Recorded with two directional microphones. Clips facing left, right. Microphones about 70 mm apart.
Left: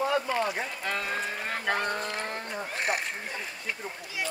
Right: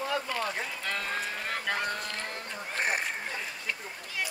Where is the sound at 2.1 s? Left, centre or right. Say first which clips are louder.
Left 4 dB; centre.